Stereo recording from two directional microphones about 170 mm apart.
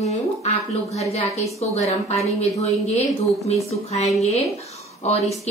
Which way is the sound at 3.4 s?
40° left (ahead or behind).